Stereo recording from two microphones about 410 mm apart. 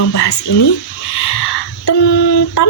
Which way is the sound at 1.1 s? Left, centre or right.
Left.